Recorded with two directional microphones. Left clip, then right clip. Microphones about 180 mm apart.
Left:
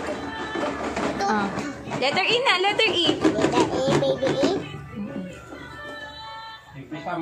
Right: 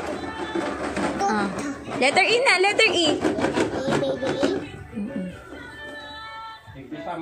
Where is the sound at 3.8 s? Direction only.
15° left (ahead or behind).